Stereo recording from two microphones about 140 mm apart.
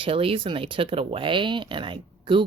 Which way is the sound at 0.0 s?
40° right (ahead or behind).